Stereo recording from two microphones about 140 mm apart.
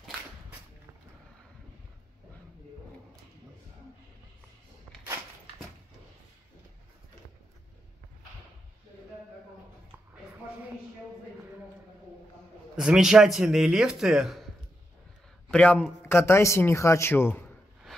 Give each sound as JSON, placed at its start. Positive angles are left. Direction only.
{"t": 12.7, "sound": "a man's voice", "side_deg": -5}
{"t": 15.4, "sound": "a man's voice", "side_deg": 10}